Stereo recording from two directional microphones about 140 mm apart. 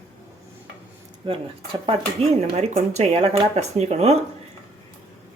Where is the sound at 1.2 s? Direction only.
40° right (ahead or behind).